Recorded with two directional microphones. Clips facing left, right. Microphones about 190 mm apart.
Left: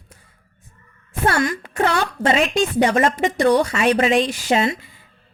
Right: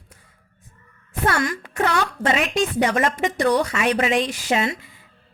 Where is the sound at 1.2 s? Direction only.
25° left (ahead or behind).